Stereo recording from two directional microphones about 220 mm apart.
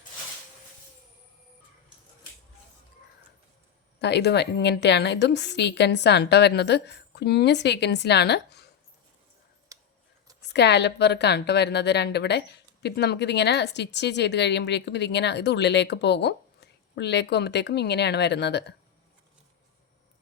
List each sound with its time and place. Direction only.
4.0 s a woman's voice: 50° left (ahead or behind)
10.5 s a woman's voice: 50° left (ahead or behind)